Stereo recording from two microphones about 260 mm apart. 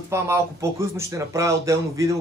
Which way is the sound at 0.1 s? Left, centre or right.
Centre.